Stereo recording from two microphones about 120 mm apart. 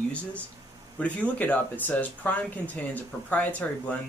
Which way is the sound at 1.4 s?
15° left (ahead or behind).